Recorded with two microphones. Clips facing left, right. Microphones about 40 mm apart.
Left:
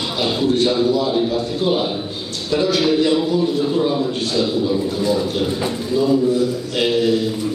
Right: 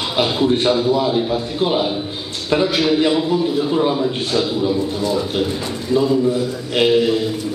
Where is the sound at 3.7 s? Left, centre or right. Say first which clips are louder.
Right 1 dB; right.